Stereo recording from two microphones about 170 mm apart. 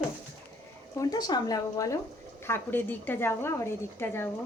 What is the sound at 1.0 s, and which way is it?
A woman's voice, 25° left (ahead or behind).